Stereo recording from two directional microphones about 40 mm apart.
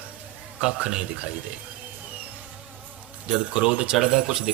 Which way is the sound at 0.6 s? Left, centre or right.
Centre.